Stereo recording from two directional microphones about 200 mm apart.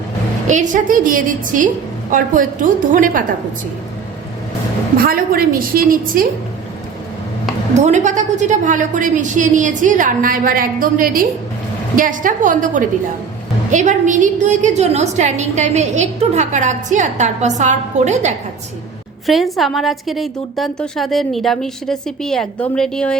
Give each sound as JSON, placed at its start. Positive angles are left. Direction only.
{"t": 0.4, "sound": "a woman's voice", "side_deg": -40}
{"t": 4.9, "sound": "a woman's voice", "side_deg": -45}
{"t": 7.7, "sound": "a woman's voice", "side_deg": -35}
{"t": 19.2, "sound": "a woman's voice", "side_deg": 0}